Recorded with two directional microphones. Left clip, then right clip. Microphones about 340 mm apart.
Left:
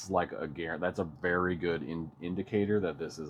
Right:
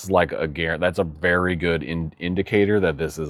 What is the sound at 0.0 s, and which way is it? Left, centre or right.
Speech, right.